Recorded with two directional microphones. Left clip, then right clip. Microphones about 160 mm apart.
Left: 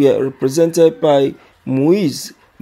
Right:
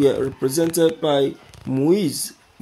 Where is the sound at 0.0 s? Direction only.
20° left (ahead or behind).